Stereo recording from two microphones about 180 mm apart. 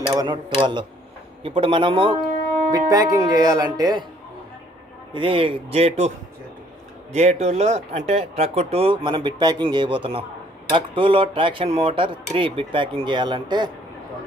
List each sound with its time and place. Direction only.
0.1 s speech: 20° right (ahead or behind)
5.1 s speech: 30° right (ahead or behind)